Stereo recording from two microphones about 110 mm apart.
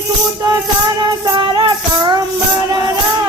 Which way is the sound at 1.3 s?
45° right (ahead or behind).